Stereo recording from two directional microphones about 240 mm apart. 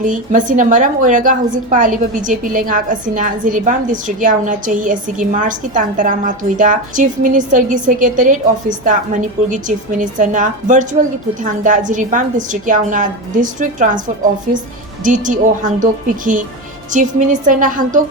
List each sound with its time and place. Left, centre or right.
0.0 s a woman's voice: right
15.0 s a woman's voice: right